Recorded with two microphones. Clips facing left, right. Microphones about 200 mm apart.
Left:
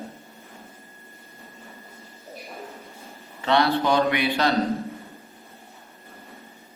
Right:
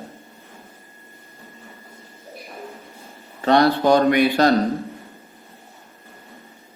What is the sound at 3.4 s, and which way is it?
Speech, 45° right (ahead or behind).